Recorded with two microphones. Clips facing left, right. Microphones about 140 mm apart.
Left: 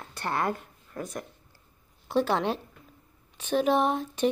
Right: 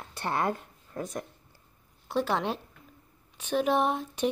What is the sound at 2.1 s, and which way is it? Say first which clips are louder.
A woman's voice: left 3 dB; 5° right (ahead or behind).